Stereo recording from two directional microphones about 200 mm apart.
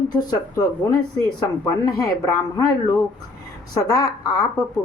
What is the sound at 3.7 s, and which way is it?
Speech, 20° left (ahead or behind).